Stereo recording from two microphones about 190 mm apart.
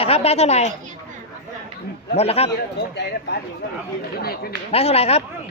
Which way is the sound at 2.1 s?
30° left (ahead or behind).